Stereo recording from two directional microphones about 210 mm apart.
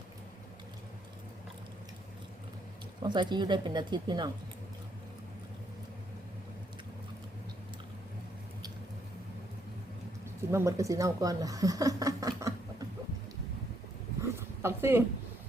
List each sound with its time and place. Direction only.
3.0 s speech: 20° right (ahead or behind)
10.5 s speech: 15° right (ahead or behind)
14.2 s dog: 10° right (ahead or behind)